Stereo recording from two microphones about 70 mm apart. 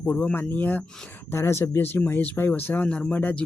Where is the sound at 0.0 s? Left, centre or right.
Left.